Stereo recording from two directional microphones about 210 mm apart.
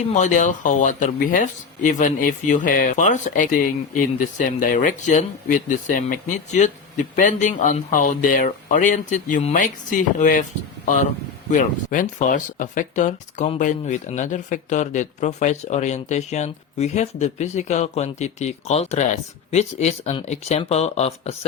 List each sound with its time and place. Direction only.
0.1 s speech: 35° left (ahead or behind)